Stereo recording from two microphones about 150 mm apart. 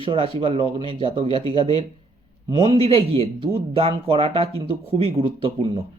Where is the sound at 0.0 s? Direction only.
35° right (ahead or behind).